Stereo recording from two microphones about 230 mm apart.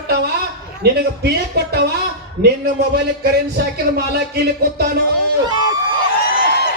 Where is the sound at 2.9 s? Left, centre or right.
Right.